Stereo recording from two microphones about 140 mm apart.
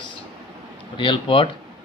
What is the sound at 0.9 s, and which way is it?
Speech, 35° left (ahead or behind).